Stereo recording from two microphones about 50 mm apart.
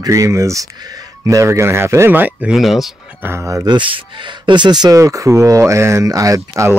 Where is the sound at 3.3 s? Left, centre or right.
Right.